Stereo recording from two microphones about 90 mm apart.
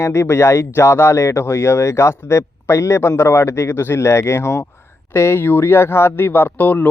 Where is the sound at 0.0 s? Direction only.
30° left (ahead or behind).